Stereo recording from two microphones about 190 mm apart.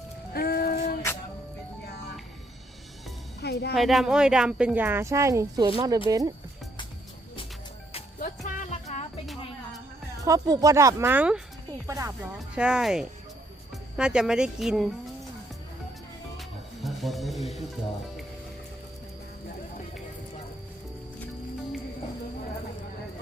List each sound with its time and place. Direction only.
0.3 s a sound: 55° left (ahead or behind)
3.4 s speech: 60° left (ahead or behind)
3.8 s speech: centre (ahead or behind); by 6.3 s 20° right (ahead or behind)
8.2 s music: 45° left (ahead or behind)
10.2 s speech: 20° right (ahead or behind)
12.4 s speech: 5° right (ahead or behind)
16.4 s music: centre (ahead or behind)